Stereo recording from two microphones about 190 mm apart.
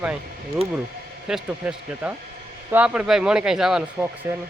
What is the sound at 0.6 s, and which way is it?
Speech, 30° right (ahead or behind).